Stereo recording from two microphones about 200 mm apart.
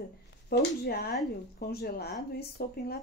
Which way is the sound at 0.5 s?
50° left (ahead or behind).